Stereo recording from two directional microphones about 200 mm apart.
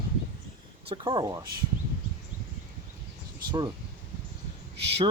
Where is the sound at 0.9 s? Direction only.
20° right (ahead or behind).